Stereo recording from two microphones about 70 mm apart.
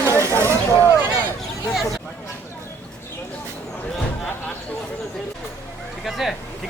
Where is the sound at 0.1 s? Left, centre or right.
Left.